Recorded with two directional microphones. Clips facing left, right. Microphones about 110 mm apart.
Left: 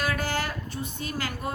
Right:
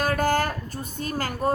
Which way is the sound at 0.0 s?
45° right (ahead or behind).